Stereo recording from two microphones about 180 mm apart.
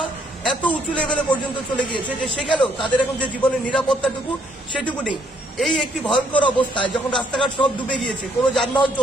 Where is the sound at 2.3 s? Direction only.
25° left (ahead or behind).